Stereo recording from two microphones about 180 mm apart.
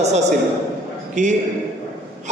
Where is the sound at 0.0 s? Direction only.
40° right (ahead or behind).